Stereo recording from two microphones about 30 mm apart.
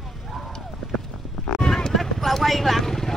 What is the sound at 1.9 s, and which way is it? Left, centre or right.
Vehicle, centre.